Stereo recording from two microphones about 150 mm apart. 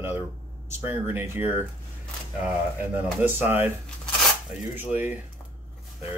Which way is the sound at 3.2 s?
15° right (ahead or behind).